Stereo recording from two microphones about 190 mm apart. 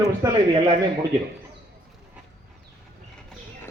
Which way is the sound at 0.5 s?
30° right (ahead or behind).